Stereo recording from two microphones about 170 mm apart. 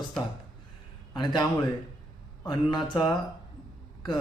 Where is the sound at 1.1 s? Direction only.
25° left (ahead or behind).